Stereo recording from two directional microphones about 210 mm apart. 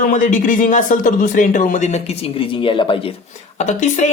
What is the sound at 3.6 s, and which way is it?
Speech, 35° left (ahead or behind).